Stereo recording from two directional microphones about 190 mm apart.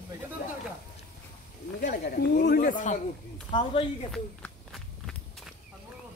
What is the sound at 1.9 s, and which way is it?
Speech, 45° left (ahead or behind).